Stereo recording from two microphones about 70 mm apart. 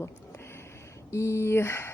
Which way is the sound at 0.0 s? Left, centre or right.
Left.